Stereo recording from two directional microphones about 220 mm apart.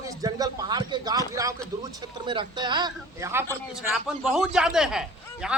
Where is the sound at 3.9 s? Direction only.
5° right (ahead or behind).